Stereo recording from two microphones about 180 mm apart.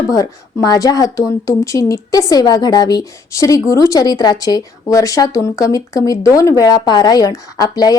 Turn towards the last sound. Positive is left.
turn(degrees=20)  # may be behind; listen again after turning